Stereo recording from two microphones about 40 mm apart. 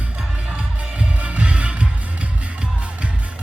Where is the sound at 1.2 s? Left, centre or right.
Right.